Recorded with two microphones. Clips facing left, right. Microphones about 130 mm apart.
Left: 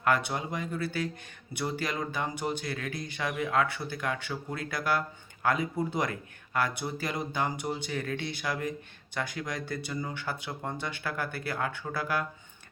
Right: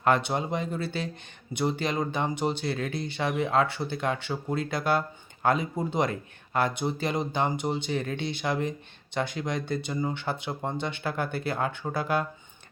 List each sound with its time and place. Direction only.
0.0 s speech: 25° right (ahead or behind)